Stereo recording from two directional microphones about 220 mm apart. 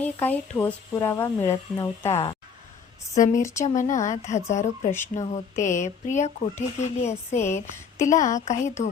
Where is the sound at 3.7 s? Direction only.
35° left (ahead or behind).